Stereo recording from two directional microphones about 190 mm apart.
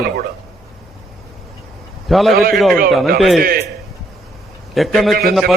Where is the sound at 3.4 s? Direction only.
50° right (ahead or behind).